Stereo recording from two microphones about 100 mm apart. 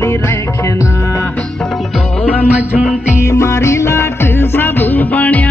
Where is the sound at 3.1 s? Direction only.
30° left (ahead or behind).